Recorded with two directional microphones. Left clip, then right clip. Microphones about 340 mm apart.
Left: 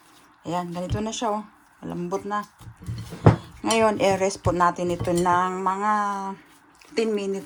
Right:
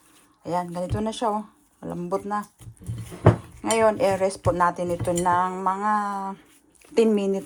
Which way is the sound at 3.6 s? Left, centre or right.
Centre.